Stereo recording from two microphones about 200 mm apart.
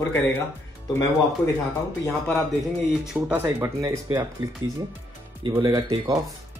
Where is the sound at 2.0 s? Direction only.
10° left (ahead or behind).